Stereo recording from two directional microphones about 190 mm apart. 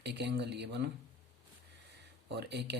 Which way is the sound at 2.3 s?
60° right (ahead or behind).